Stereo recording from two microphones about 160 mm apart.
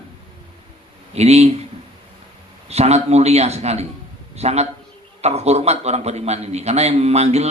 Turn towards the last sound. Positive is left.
turn(degrees=-40)  # may be behind; listen again after turning